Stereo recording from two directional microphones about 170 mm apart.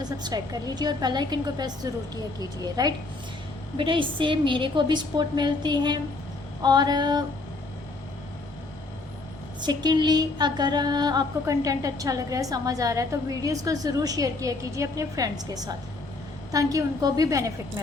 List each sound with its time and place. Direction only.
0.0 s speech: 25° right (ahead or behind)
9.6 s speech: 25° right (ahead or behind)